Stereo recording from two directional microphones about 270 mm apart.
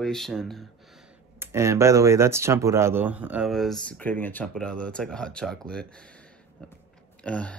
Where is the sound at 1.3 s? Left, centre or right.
Centre.